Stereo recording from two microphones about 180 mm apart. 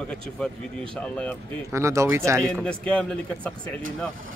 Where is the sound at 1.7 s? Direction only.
15° right (ahead or behind).